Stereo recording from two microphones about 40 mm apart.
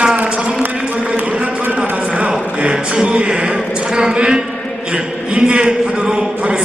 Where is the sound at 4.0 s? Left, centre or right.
Right.